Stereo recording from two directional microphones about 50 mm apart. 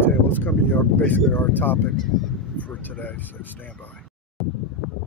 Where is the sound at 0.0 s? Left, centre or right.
Left.